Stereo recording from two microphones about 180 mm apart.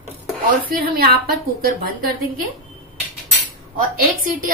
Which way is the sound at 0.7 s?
55° right (ahead or behind).